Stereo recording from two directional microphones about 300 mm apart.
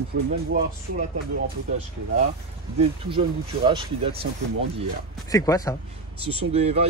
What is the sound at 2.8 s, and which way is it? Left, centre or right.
Speech, centre.